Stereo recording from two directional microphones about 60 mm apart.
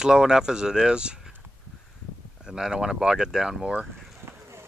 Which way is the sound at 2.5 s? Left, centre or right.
Centre.